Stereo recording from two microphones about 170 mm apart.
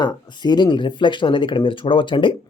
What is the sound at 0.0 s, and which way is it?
Speech, 25° left (ahead or behind).